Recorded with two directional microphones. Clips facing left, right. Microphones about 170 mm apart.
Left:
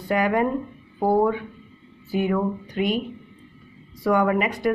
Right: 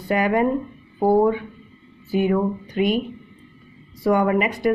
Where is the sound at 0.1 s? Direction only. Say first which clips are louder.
Right 2 dB; 15° right (ahead or behind).